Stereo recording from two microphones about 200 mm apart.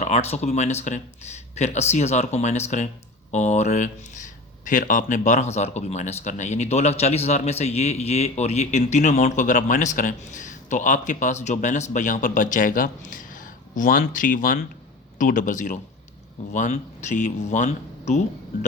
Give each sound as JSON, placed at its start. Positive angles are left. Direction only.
{"t": 0.0, "sound": "speech", "side_deg": 30}